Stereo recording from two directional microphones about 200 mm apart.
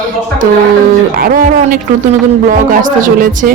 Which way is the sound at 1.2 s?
45° right (ahead or behind).